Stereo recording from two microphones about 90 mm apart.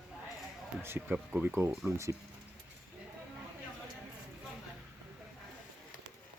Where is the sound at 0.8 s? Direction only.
25° right (ahead or behind).